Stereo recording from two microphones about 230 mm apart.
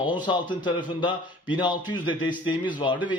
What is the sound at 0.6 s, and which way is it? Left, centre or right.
A man's voice, centre.